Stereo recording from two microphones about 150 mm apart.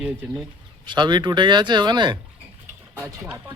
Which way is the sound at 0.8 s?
30° right (ahead or behind).